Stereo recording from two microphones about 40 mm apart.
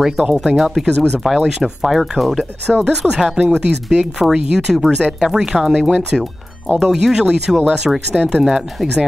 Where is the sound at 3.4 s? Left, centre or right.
Centre.